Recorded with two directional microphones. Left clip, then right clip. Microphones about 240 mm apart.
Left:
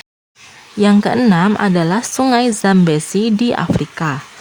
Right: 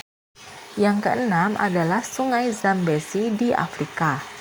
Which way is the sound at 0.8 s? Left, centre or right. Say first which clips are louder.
Left 7 dB; left.